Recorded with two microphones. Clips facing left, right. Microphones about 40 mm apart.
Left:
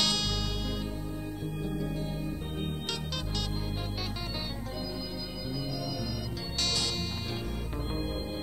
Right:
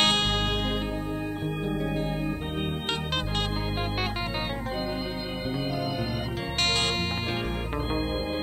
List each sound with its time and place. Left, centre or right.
0.0 s music: right
1.7 s music: right
6.6 s music: right